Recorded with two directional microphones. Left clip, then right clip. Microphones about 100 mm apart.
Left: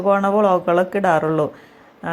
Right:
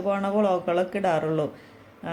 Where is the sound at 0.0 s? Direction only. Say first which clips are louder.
Left 8 dB; 40° left (ahead or behind).